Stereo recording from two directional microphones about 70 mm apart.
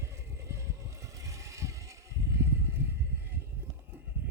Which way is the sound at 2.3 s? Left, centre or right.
Right.